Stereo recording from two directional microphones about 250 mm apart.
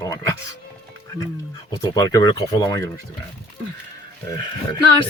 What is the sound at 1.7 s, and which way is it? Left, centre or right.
Speech, centre.